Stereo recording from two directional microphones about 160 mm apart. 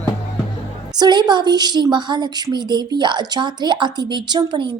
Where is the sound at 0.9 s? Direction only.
25° right (ahead or behind).